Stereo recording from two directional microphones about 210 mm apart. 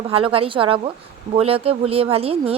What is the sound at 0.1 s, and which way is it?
A woman's voice, 25° right (ahead or behind).